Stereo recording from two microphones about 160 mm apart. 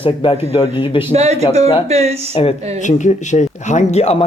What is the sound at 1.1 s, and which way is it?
A woman's voice, 40° right (ahead or behind).